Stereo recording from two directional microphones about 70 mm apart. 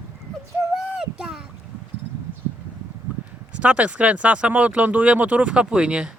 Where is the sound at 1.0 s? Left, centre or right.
Centre.